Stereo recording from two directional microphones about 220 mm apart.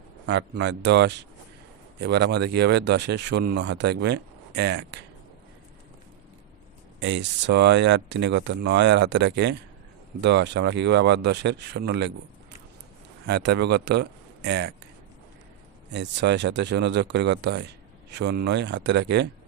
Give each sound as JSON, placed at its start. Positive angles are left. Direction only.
{"t": 0.3, "sound": "speech", "side_deg": -50}
{"t": 7.0, "sound": "speech", "side_deg": -55}
{"t": 13.2, "sound": "speech", "side_deg": -50}
{"t": 15.9, "sound": "speech", "side_deg": -50}